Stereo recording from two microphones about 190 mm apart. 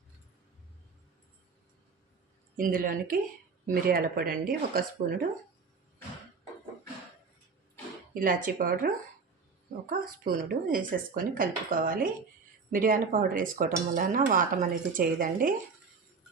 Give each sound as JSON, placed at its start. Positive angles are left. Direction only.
{"t": 2.6, "sound": "speech", "side_deg": -45}
{"t": 8.1, "sound": "speech", "side_deg": -50}